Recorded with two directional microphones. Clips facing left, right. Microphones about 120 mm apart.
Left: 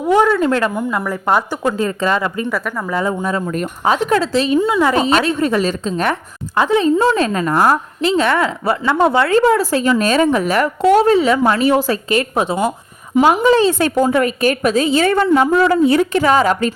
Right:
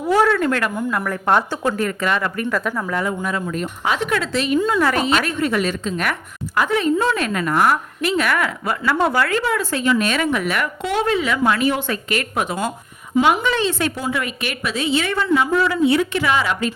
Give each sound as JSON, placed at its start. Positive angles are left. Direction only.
{"t": 0.0, "sound": "a woman's voice", "side_deg": 20}
{"t": 1.7, "sound": "a woman's voice", "side_deg": 25}
{"t": 2.6, "sound": "speech", "side_deg": 5}
{"t": 2.9, "sound": "a woman's voice", "side_deg": 25}
{"t": 4.6, "sound": "a woman's voice", "side_deg": 15}
{"t": 5.0, "sound": "a woman's voice", "side_deg": 35}
{"t": 9.4, "sound": "a woman's voice", "side_deg": 35}
{"t": 13.2, "sound": "a woman's voice", "side_deg": 35}